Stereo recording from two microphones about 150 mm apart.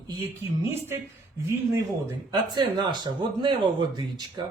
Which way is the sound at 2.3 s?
30° right (ahead or behind).